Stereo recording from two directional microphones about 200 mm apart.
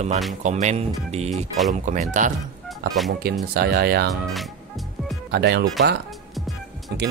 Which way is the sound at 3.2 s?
50° right (ahead or behind).